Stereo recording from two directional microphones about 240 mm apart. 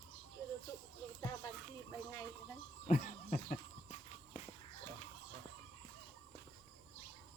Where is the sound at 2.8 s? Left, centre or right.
Left.